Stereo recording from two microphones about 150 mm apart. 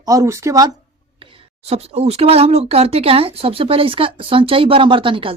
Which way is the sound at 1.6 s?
45° right (ahead or behind).